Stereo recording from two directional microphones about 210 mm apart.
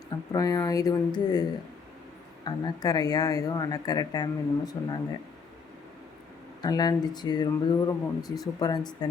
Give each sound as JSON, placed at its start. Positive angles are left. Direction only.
{"t": 0.3, "sound": "speech", "side_deg": 15}
{"t": 6.6, "sound": "speech", "side_deg": 20}